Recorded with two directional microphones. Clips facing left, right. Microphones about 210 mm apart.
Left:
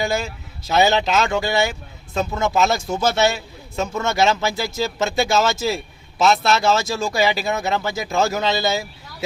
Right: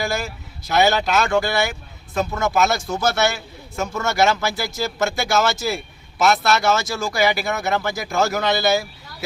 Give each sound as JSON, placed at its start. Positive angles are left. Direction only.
{"t": 0.0, "sound": "speech", "side_deg": 20}